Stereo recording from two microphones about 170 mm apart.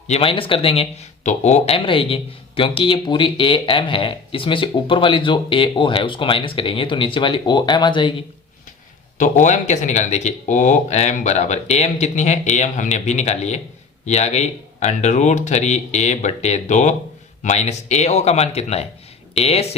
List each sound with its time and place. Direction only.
0.1 s speech: 35° left (ahead or behind)
9.1 s speech: 45° left (ahead or behind)